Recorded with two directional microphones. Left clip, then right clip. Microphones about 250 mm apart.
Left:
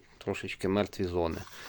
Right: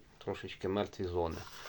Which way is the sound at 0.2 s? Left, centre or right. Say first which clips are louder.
Left 5 dB; left.